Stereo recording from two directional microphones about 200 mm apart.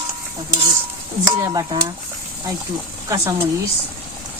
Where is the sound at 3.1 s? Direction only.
15° right (ahead or behind).